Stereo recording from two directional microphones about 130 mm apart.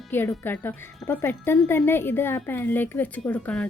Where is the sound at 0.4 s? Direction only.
15° left (ahead or behind).